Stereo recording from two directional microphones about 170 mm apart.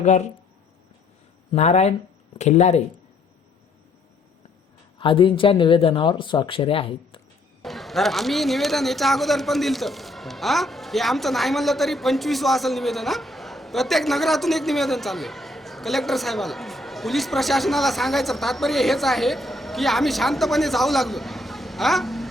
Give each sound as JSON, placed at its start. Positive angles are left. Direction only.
{"t": 0.0, "sound": "speech", "side_deg": 45}
{"t": 1.5, "sound": "speech", "side_deg": 40}
{"t": 4.9, "sound": "speech", "side_deg": 30}
{"t": 7.6, "sound": "speech", "side_deg": 0}